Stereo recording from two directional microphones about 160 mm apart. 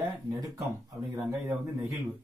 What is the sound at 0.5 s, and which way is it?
Speech, 20° right (ahead or behind).